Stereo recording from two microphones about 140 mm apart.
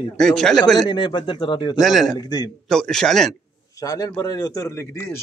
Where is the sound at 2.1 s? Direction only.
30° left (ahead or behind).